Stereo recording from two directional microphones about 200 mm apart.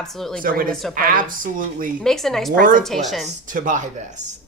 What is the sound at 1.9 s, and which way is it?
Speech, centre (ahead or behind).